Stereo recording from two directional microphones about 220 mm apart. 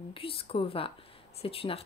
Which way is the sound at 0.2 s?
25° left (ahead or behind).